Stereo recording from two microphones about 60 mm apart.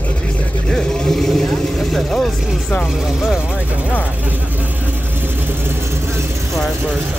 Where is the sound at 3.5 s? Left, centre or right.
Right.